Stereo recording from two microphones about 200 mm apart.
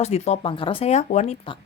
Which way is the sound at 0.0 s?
30° left (ahead or behind).